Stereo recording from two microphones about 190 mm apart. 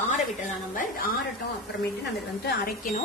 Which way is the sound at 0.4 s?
45° left (ahead or behind).